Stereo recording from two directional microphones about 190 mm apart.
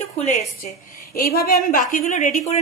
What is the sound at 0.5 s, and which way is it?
A woman's voice, 50° left (ahead or behind).